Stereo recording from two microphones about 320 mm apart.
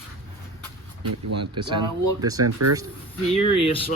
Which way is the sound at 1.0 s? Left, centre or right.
Right.